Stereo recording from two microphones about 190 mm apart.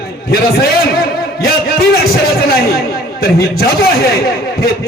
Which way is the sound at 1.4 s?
55° left (ahead or behind).